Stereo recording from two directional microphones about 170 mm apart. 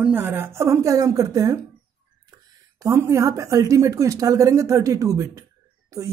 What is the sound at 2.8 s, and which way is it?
A woman's voice, 15° right (ahead or behind).